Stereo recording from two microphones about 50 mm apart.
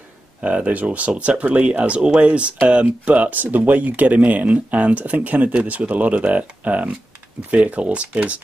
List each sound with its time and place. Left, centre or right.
0.4 s speech: right